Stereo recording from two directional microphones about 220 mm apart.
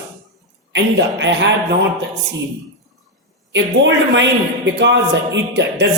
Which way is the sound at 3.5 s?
55° right (ahead or behind).